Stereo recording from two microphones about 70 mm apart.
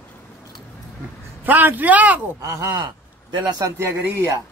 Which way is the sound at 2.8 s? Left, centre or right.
Right.